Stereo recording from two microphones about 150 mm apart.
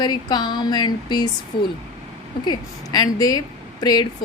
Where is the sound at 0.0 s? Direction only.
30° left (ahead or behind).